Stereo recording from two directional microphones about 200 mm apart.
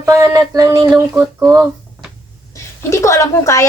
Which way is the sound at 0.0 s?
15° right (ahead or behind).